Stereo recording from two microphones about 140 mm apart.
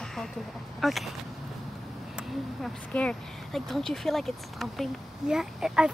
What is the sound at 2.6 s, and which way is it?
Speech, 5° left (ahead or behind).